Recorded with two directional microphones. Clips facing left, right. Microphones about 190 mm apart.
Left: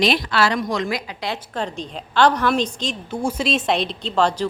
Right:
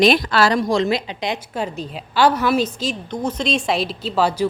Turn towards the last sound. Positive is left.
turn(degrees=-5)  # may be behind; listen again after turning